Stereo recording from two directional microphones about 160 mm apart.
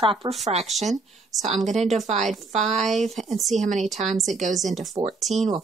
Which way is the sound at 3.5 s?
45° right (ahead or behind).